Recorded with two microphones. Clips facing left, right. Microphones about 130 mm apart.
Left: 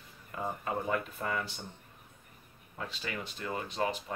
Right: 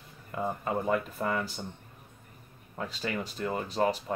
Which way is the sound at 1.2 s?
40° right (ahead or behind).